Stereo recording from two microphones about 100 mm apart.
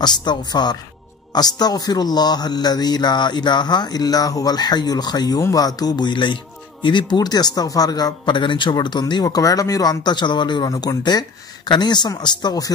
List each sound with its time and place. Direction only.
0.0 s speech: 45° left (ahead or behind)